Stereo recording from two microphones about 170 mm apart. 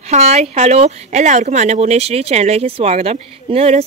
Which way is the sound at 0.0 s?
40° right (ahead or behind).